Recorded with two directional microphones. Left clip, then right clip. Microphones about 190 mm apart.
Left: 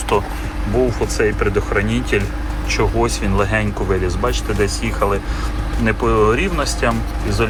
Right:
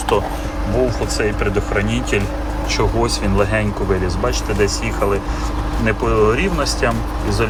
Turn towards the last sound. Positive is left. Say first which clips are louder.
# even
turn(degrees=-10)  # may be behind; listen again after turning